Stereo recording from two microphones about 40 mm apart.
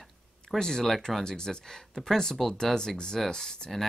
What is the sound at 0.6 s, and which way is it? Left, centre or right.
Speech, centre.